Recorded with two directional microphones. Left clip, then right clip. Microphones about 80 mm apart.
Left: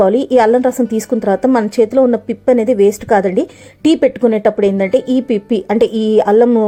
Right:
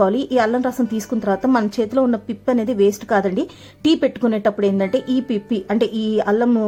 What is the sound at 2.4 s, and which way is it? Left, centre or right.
Speech, left.